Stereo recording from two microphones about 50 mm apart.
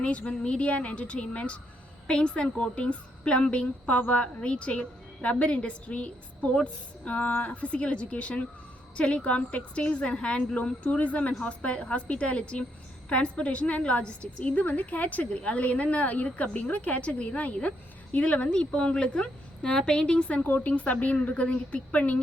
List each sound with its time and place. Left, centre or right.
0.0 s a woman's voice: left
20.4 s speech: left